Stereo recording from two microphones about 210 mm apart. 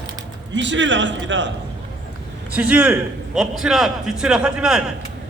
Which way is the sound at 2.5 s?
5° right (ahead or behind).